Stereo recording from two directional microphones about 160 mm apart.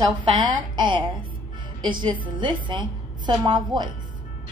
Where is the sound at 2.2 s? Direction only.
30° right (ahead or behind).